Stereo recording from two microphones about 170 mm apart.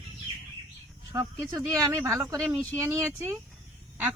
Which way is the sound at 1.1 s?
20° right (ahead or behind).